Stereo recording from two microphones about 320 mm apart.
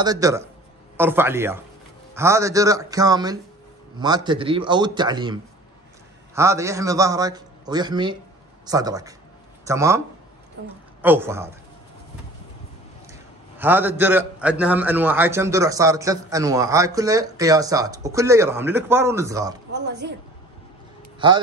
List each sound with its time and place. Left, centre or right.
0.0 s a man's voice: centre
13.1 s a man's voice: centre
19.7 s a woman's voice: right